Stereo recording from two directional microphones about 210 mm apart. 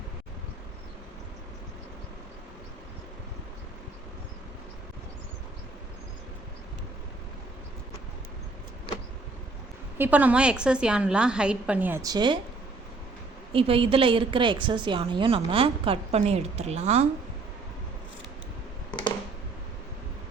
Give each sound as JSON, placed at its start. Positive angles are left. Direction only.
{"t": 10.0, "sound": "a woman's voice", "side_deg": -5}
{"t": 13.5, "sound": "a woman's voice", "side_deg": -25}